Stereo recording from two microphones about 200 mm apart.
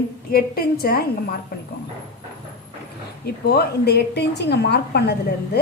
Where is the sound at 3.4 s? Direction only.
50° left (ahead or behind).